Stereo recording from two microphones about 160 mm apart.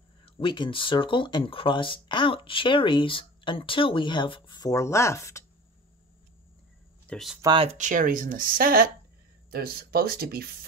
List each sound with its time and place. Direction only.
0.2 s speech: 30° left (ahead or behind)
7.1 s speech: centre (ahead or behind)
7.4 s speech: 35° right (ahead or behind)
7.7 s speech: 55° right (ahead or behind); by 10.5 s 70° right (ahead or behind)